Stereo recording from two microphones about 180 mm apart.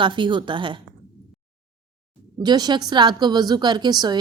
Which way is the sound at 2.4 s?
25° right (ahead or behind).